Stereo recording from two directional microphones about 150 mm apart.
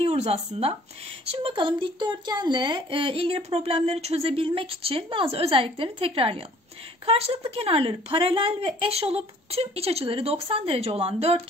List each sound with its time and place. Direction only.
0.0 s speech: 45° right (ahead or behind)